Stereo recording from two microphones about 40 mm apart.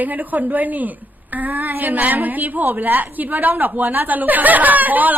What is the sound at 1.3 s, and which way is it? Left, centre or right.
A woman's voice, right.